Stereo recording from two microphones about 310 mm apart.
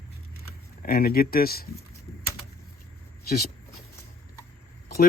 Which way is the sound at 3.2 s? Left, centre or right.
Left.